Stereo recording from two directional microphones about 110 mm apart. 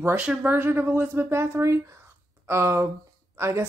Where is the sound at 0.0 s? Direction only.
15° right (ahead or behind).